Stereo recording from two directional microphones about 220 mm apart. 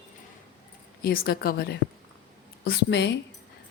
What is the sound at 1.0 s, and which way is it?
A woman's voice, 45° left (ahead or behind).